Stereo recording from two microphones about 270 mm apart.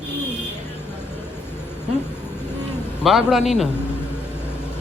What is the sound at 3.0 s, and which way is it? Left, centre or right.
Speech, centre.